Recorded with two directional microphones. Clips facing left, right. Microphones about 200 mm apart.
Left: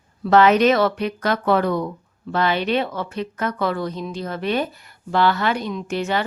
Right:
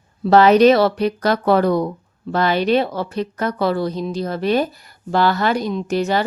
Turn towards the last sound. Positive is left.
turn(degrees=-40)  # may be behind; listen again after turning